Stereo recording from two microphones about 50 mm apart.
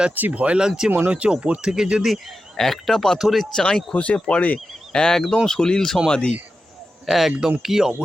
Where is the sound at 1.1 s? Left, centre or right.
Right.